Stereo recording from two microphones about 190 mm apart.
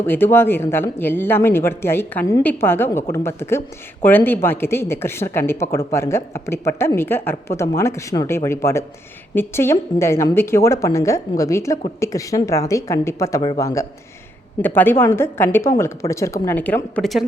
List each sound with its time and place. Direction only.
0.0 s speech: 10° left (ahead or behind)